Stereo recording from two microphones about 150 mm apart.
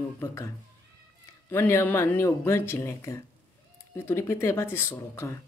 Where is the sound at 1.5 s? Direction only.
15° left (ahead or behind).